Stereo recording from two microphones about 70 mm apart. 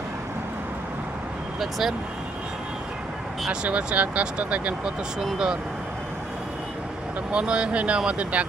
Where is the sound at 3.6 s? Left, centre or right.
Centre.